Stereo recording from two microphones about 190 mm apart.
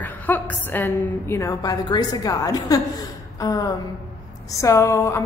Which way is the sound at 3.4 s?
20° left (ahead or behind).